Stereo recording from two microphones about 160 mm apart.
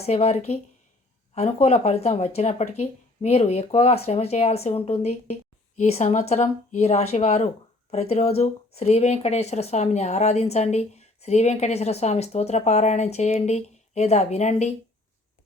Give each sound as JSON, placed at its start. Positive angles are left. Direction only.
{"t": 0.0, "sound": "speech", "side_deg": 40}